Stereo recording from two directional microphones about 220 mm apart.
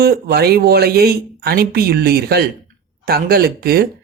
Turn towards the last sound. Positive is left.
turn(degrees=-45)  # may be behind; listen again after turning